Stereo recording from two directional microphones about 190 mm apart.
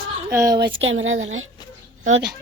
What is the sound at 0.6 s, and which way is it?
Speech, 75° right (ahead or behind).